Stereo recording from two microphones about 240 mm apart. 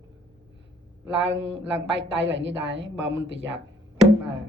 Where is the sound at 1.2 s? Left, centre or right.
Right.